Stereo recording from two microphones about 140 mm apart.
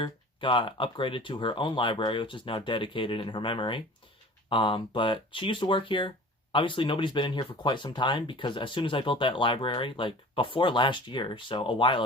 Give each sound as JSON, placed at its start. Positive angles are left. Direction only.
{"t": 0.0, "sound": "speech", "side_deg": 35}